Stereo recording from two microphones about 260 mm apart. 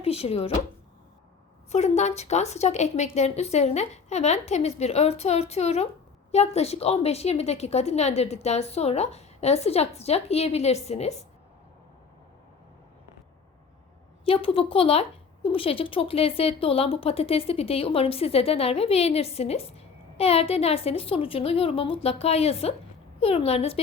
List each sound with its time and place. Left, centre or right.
0.0 s speech: left
1.7 s speech: left
14.3 s speech: left